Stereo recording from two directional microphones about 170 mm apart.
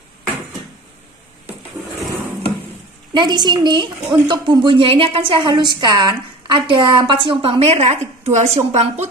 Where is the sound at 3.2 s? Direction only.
25° right (ahead or behind).